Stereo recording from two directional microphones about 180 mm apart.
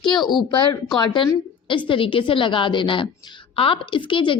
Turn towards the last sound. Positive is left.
turn(degrees=30)  # may be behind; listen again after turning